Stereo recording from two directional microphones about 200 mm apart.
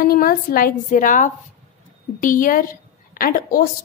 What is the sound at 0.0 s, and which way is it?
Speech, 50° left (ahead or behind).